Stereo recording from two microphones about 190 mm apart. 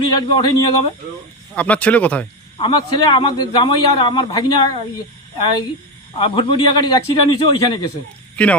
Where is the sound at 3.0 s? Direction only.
25° left (ahead or behind).